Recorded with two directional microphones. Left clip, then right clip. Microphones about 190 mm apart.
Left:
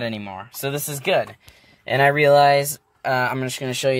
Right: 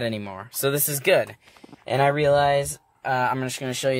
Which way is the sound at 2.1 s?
20° left (ahead or behind).